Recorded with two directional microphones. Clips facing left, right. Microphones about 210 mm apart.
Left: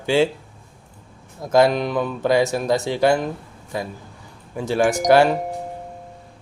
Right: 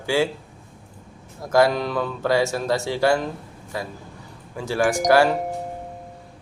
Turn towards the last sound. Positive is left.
turn(degrees=20)  # may be behind; listen again after turning